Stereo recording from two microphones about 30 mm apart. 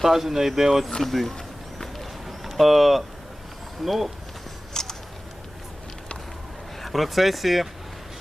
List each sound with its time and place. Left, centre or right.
0.0 s speech: centre
1.0 s speech: centre
2.2 s a sound: centre
3.8 s speech: centre
4.7 s a sound: left
6.8 s speech: centre